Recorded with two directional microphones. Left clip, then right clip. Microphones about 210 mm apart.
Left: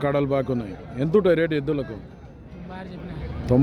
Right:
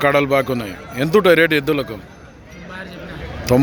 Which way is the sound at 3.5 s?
5° left (ahead or behind).